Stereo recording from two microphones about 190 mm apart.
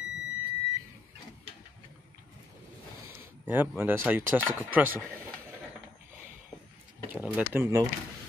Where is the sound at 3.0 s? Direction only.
10° right (ahead or behind).